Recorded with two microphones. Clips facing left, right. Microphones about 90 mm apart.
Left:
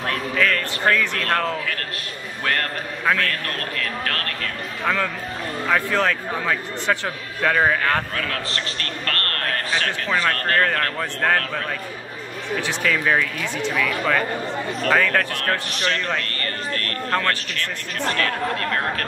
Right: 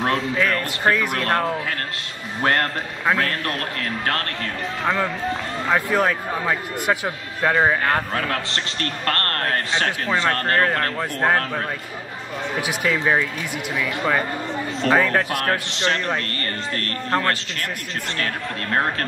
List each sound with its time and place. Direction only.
0.0 s a man's voice: 20° right (ahead or behind)
7.8 s a man's voice: 30° right (ahead or behind)